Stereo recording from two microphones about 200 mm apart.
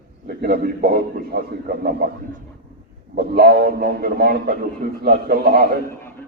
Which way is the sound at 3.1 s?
50° right (ahead or behind).